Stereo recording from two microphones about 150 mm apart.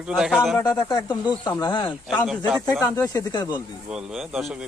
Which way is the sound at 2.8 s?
20° left (ahead or behind).